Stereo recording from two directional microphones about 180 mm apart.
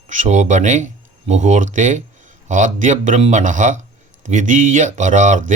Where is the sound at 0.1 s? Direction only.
40° right (ahead or behind).